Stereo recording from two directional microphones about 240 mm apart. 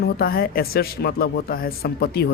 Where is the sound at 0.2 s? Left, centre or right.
Left.